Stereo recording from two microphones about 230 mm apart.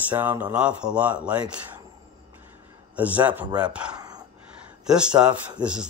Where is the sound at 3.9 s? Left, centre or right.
Centre.